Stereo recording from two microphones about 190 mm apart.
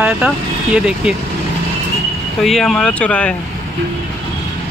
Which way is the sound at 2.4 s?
Centre (ahead or behind).